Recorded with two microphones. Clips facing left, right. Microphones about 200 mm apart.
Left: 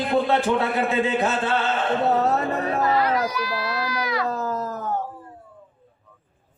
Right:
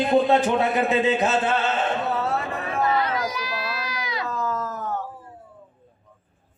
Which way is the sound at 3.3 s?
20° right (ahead or behind).